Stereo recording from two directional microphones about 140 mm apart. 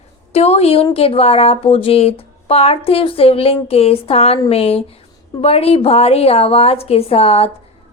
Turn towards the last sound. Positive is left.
turn(degrees=45)  # may be behind; listen again after turning